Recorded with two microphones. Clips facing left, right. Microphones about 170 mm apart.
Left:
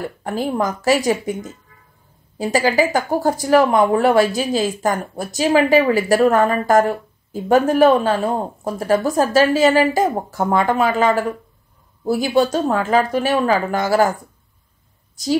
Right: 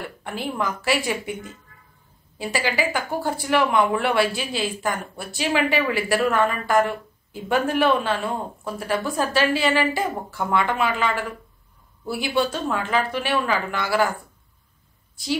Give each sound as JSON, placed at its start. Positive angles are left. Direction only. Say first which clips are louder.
{"t": 0.0, "sound": "speech", "louder": "left 7 dB", "side_deg": 40}
{"t": 15.2, "sound": "a woman's voice", "louder": "left 6 dB", "side_deg": 40}